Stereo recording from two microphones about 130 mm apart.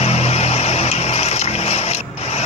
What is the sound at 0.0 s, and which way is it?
Vehicle, 55° left (ahead or behind).